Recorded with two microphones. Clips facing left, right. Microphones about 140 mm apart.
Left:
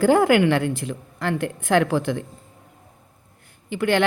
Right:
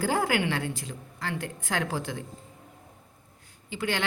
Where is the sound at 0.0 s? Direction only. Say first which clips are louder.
Left 10 dB; 60° left (ahead or behind).